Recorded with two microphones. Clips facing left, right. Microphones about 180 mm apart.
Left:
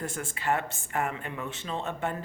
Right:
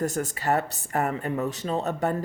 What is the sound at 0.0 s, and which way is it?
Speech, 40° right (ahead or behind).